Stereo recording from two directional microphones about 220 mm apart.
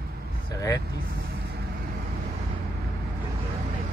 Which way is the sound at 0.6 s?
15° left (ahead or behind).